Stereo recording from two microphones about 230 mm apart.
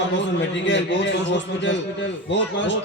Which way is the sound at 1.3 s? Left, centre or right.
Left.